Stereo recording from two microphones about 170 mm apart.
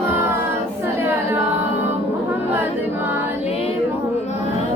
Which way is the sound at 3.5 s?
35° left (ahead or behind).